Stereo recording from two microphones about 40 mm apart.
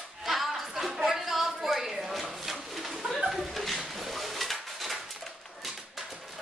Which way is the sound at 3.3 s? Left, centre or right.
Centre.